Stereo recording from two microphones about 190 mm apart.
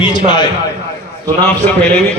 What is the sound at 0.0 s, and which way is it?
Speech, 25° left (ahead or behind).